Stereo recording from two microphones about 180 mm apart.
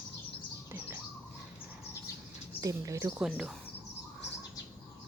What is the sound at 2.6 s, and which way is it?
Speech, 15° right (ahead or behind).